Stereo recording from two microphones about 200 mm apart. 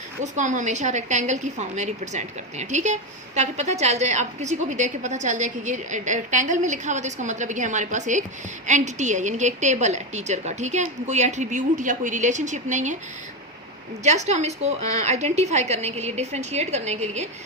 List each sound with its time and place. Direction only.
0.2 s a woman's voice: 40° right (ahead or behind)
14.0 s a woman's voice: 35° right (ahead or behind)